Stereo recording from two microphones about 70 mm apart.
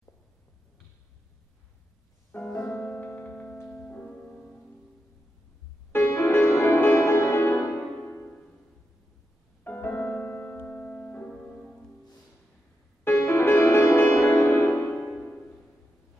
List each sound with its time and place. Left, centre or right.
2.3 s music: left
5.9 s music: left
9.6 s music: left; by 11.7 s centre
13.0 s music: left
15.0 s music: centre